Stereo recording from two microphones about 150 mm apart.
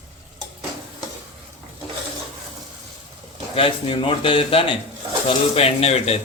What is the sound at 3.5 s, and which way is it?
A man's voice, 35° left (ahead or behind).